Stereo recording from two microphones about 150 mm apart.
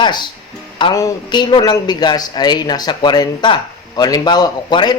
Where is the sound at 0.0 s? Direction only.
30° left (ahead or behind).